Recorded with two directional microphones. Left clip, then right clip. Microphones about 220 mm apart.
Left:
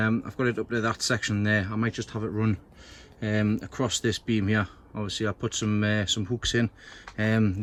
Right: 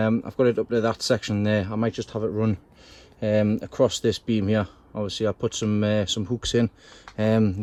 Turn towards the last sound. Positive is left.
turn(degrees=-20)  # may be behind; listen again after turning